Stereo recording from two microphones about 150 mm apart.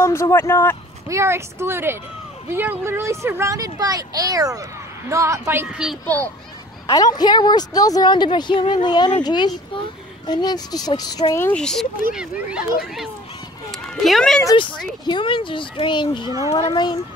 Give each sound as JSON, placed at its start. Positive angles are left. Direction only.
{"t": 0.0, "sound": "speech", "side_deg": 15}
{"t": 1.0, "sound": "speech", "side_deg": -20}
{"t": 5.7, "sound": "speech", "side_deg": -5}
{"t": 6.9, "sound": "a woman's voice", "side_deg": 25}
{"t": 11.4, "sound": "speech", "side_deg": 5}
{"t": 13.7, "sound": "run", "side_deg": 0}
{"t": 14.4, "sound": "a woman's voice", "side_deg": 25}
{"t": 16.3, "sound": "speech", "side_deg": -20}
{"t": 16.5, "sound": "speech", "side_deg": 30}